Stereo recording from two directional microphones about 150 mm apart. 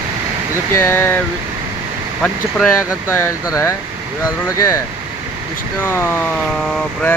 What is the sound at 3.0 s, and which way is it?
Speech, 15° left (ahead or behind).